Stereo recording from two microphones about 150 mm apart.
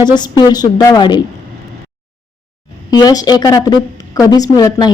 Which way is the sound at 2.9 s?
25° left (ahead or behind).